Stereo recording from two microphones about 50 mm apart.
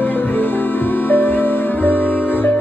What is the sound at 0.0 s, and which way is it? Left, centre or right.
Music, left.